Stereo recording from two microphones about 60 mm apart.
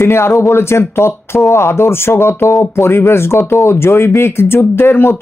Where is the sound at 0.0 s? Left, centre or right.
Left.